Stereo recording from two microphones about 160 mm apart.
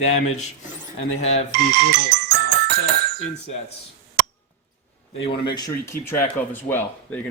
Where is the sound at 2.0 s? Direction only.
90° right.